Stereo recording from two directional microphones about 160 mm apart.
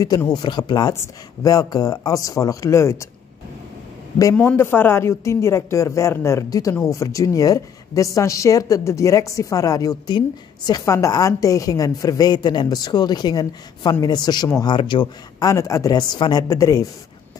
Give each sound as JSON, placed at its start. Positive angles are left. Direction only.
{"t": 0.0, "sound": "a woman's voice", "side_deg": 20}
{"t": 4.2, "sound": "a woman's voice", "side_deg": 15}